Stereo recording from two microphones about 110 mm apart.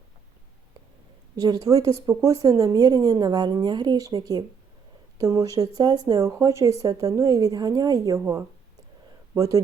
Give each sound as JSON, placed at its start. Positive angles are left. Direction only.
{"t": 1.4, "sound": "speech", "side_deg": -35}
{"t": 9.3, "sound": "speech", "side_deg": -30}